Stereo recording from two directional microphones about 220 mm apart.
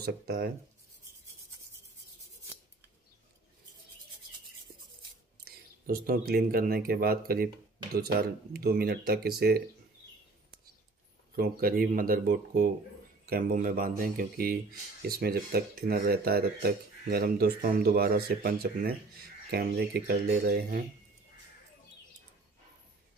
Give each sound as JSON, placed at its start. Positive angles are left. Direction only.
{"t": 0.0, "sound": "speech", "side_deg": -45}
{"t": 5.4, "sound": "speech", "side_deg": -40}
{"t": 11.3, "sound": "speech", "side_deg": -40}